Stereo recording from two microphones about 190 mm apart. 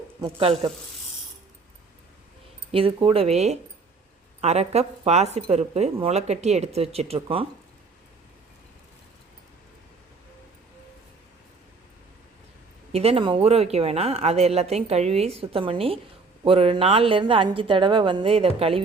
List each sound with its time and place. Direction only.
0.2 s a woman's voice: 30° right (ahead or behind)
2.7 s speech: 30° right (ahead or behind)
12.9 s a woman's voice: 30° right (ahead or behind)